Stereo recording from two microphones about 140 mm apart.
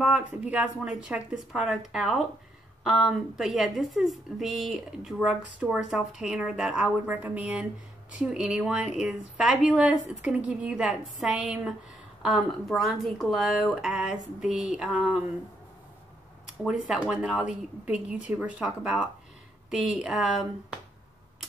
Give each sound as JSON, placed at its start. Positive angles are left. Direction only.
{"t": 0.0, "sound": "a woman's voice", "side_deg": -10}
{"t": 16.8, "sound": "a woman's voice", "side_deg": -5}